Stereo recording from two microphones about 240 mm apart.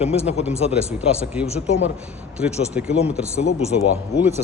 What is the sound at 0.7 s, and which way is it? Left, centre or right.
Speech, centre.